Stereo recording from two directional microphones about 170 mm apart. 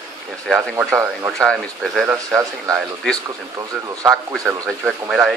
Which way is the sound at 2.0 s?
15° right (ahead or behind).